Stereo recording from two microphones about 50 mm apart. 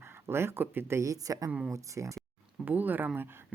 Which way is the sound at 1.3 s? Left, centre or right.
Right.